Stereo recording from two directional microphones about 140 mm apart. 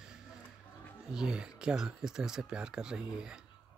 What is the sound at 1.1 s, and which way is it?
Speech, 5° right (ahead or behind).